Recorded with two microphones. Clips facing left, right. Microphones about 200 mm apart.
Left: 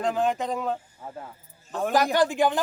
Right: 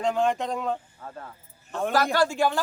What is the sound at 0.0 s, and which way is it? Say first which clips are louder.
A man's voice: right 1 dB; centre (ahead or behind).